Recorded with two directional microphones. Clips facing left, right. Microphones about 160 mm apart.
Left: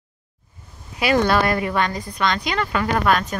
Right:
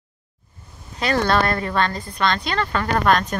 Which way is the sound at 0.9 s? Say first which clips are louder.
Left 2 dB; 10° left (ahead or behind).